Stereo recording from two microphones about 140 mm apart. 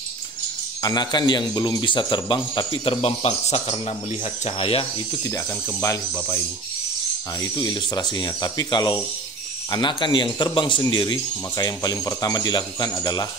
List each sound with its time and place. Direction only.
0.8 s a man's voice: 30° left (ahead or behind)
5.3 s speech: 20° left (ahead or behind)
7.5 s speech: 30° left (ahead or behind)